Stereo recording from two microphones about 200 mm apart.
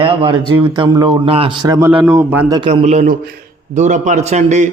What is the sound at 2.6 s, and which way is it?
A man's voice, 30° right (ahead or behind).